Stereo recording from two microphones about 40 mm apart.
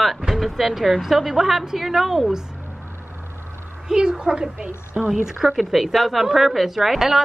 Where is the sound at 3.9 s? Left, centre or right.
Centre.